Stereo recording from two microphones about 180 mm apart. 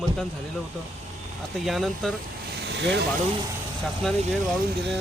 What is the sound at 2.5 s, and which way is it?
Vehicle, 70° right (ahead or behind).